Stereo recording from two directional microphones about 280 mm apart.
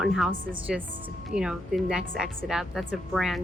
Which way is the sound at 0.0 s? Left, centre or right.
Centre.